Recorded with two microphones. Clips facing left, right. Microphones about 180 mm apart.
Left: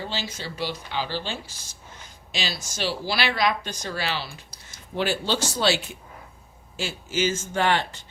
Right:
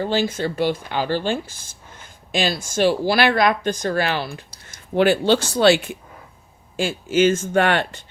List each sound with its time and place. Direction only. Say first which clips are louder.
0.0 s speech: right 11 dB; 50° right (ahead or behind)